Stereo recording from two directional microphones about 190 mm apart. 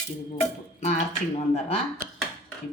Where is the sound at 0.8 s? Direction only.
35° left (ahead or behind).